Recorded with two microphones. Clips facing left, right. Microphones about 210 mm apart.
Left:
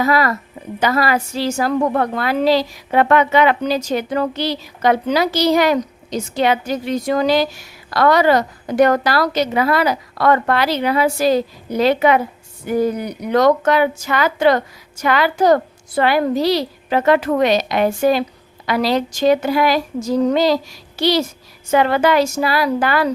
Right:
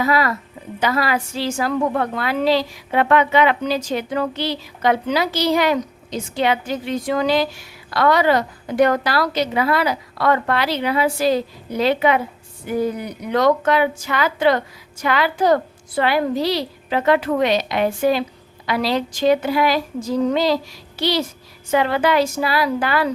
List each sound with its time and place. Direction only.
0.0 s a woman's voice: 40° left (ahead or behind)